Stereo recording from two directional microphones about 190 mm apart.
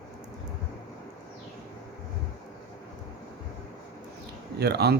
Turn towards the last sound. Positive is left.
turn(degrees=-60)  # may be behind; listen again after turning